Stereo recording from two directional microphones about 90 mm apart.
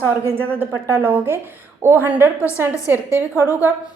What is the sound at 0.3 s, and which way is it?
A woman's voice, 25° right (ahead or behind).